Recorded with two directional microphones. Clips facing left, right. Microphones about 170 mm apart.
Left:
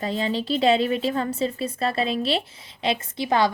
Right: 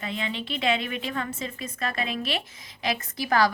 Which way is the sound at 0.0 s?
35° left (ahead or behind).